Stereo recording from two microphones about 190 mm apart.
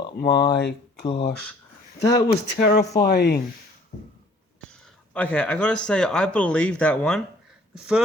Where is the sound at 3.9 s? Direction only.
45° left (ahead or behind).